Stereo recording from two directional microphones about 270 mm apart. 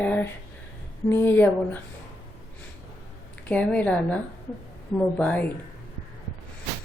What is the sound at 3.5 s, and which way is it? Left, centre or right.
Speech, centre.